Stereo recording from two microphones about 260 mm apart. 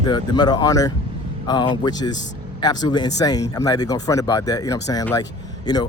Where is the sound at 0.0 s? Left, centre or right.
Centre.